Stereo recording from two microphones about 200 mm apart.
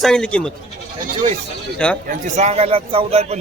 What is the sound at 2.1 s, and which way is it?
A man's voice, 35° right (ahead or behind).